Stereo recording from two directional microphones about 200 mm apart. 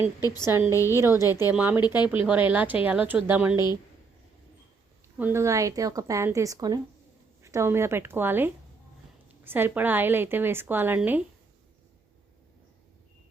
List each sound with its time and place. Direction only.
0.0 s a woman's voice: 20° left (ahead or behind)
0.9 s a woman's voice: 10° right (ahead or behind)
1.2 s a woman's voice: 20° left (ahead or behind)
1.5 s a woman's voice: 10° right (ahead or behind)
5.1 s a woman's voice: 10° right (ahead or behind)